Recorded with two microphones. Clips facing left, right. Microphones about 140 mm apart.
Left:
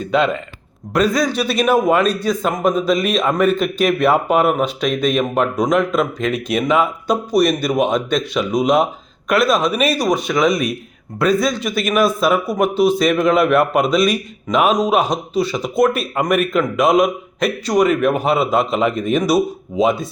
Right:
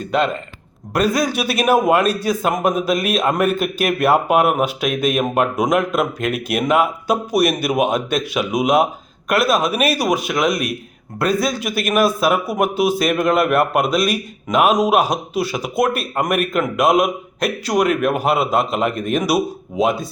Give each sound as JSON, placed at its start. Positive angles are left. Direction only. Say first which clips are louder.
{"t": 0.0, "sound": "a man's voice", "louder": "left 2 dB", "side_deg": 0}